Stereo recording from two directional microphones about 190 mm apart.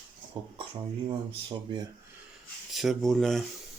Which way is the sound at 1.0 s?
25° right (ahead or behind).